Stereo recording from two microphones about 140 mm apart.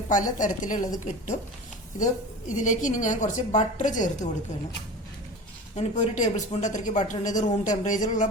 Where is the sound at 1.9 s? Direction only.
65° left (ahead or behind).